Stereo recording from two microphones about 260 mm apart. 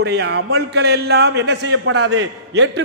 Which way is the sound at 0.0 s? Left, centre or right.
Right.